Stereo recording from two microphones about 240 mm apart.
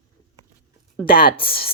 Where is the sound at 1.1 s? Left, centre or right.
Left.